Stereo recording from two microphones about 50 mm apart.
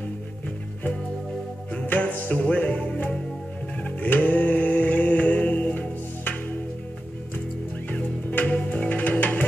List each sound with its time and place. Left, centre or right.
1.9 s music: left
3.8 s mantra: left
7.9 s music: left